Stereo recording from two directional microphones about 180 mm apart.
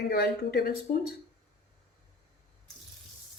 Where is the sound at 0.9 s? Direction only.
50° left (ahead or behind).